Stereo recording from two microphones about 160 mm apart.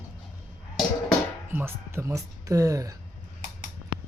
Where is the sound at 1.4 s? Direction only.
15° right (ahead or behind).